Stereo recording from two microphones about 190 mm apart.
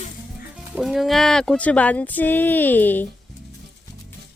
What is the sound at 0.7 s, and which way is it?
Speech, centre (ahead or behind).